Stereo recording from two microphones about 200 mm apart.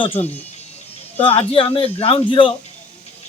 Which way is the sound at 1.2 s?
25° left (ahead or behind).